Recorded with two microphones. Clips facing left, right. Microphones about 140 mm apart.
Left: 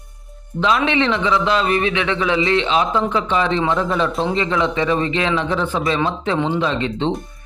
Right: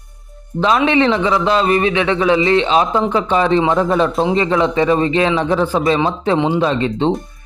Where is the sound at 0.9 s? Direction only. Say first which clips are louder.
Right 4 dB; 40° right (ahead or behind).